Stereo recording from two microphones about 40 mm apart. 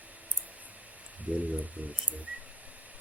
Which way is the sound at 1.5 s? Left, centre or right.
Right.